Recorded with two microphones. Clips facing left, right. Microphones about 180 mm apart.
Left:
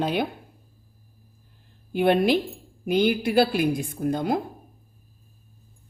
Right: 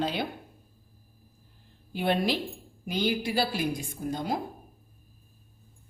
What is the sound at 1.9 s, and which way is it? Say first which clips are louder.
A woman's voice: left 7 dB; 55° left (ahead or behind).